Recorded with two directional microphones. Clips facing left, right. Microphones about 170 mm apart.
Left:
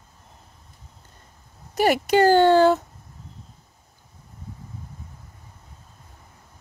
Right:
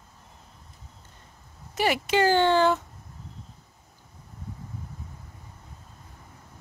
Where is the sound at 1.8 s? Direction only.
45° left (ahead or behind).